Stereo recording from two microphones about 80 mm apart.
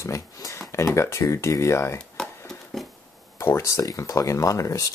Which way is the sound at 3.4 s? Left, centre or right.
Left.